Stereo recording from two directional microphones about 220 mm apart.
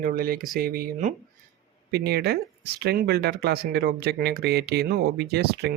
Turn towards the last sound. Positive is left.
turn(degrees=-45)  # may be behind; listen again after turning